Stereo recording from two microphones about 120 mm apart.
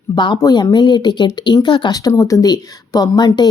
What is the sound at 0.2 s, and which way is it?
A woman's voice, 40° left (ahead or behind).